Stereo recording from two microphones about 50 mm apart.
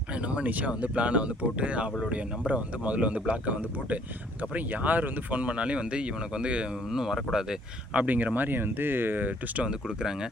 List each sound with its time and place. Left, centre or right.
0.1 s a sound: right
0.7 s speech: right
7.9 s speech: right
9.6 s speech: centre